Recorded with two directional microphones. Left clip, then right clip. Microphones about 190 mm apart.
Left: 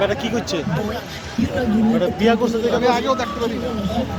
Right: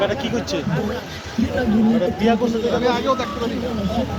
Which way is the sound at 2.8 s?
75° left (ahead or behind).